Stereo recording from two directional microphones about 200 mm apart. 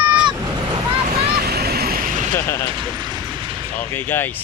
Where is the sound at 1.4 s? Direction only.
50° right (ahead or behind).